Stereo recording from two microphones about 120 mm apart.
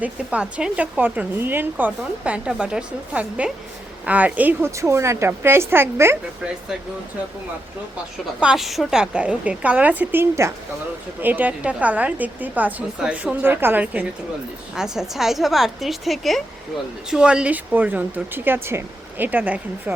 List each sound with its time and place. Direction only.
0.0 s a woman's voice: 10° right (ahead or behind)
8.4 s a woman's voice: 5° right (ahead or behind)